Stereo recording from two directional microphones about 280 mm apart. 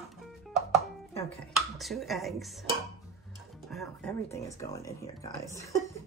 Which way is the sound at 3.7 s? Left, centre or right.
Centre.